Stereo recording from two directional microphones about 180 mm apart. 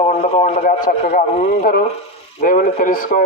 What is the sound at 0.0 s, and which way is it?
Speech, 35° left (ahead or behind).